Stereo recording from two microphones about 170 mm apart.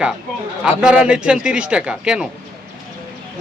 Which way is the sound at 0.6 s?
5° right (ahead or behind).